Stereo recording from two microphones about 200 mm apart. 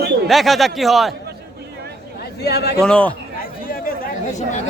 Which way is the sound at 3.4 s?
45° left (ahead or behind).